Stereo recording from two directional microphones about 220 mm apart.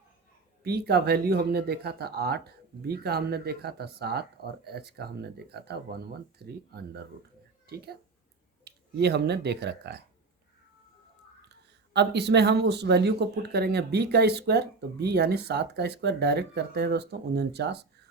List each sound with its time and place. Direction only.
0.6 s speech: 45° right (ahead or behind)
11.9 s speech: 50° right (ahead or behind)